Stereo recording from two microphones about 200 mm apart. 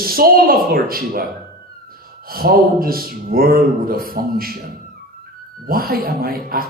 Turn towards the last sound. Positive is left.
turn(degrees=-45)  # may be behind; listen again after turning